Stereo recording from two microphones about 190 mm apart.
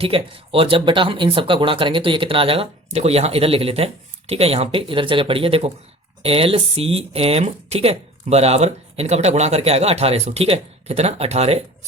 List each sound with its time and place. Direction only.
0.0 s speech: 30° right (ahead or behind)